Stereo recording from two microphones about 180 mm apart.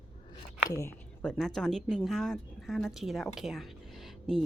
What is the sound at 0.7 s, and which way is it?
Speech, 15° left (ahead or behind).